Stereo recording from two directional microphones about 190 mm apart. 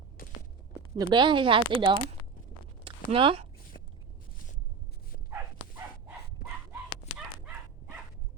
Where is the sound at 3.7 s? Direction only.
60° left (ahead or behind).